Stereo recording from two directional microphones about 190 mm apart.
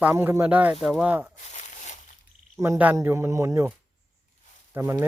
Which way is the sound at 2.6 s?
10° right (ahead or behind).